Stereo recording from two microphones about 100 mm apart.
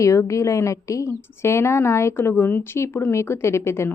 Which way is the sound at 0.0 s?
30° left (ahead or behind).